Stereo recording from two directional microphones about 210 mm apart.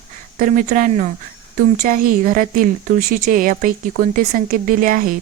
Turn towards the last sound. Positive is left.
turn(degrees=-40)  # may be behind; listen again after turning